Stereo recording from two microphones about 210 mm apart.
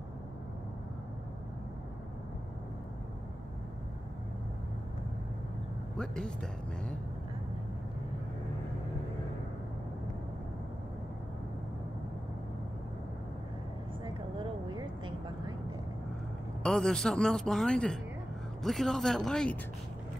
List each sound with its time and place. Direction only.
5.9 s speech: 5° left (ahead or behind)
14.0 s vehicle: 20° right (ahead or behind)
16.6 s speech: 5° left (ahead or behind)